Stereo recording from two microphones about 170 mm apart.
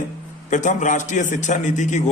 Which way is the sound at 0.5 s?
45° left (ahead or behind).